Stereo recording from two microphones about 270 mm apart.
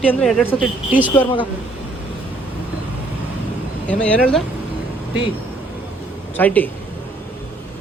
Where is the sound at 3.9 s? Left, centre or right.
Centre.